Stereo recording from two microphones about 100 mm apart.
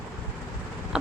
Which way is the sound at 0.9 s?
5° right (ahead or behind).